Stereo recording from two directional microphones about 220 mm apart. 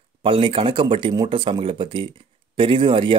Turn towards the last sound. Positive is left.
turn(degrees=-25)  # may be behind; listen again after turning